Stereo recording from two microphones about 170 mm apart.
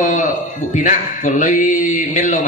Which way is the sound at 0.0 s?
45° left (ahead or behind).